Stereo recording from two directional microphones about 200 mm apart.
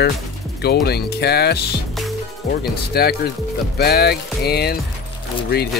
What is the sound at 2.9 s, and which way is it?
Speech, 50° left (ahead or behind).